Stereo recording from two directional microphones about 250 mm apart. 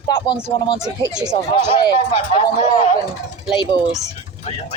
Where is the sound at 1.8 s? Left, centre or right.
Left.